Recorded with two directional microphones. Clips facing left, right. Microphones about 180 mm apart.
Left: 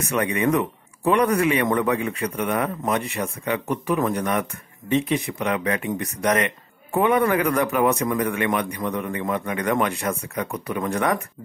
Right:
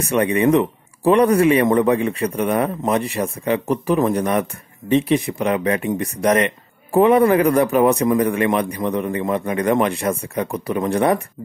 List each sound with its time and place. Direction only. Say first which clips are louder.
0.0 s speech: right 5 dB; 30° right (ahead or behind)